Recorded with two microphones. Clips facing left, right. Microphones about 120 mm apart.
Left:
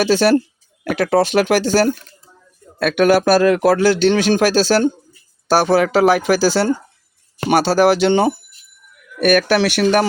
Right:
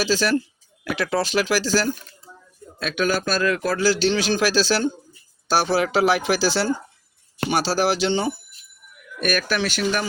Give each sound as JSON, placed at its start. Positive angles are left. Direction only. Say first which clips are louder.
{"t": 0.0, "sound": "a man's voice", "louder": "left 7 dB", "side_deg": 55}